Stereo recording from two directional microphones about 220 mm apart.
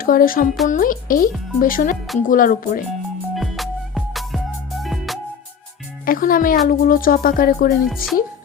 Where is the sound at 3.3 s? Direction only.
Centre (ahead or behind).